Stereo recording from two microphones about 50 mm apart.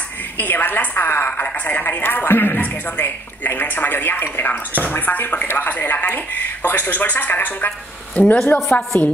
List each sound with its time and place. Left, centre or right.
0.4 s a woman's voice: left
8.9 s speech: left